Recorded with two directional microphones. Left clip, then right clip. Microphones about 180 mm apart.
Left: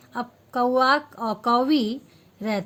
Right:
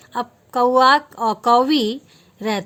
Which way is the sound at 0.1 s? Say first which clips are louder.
Right 6 dB; 45° right (ahead or behind).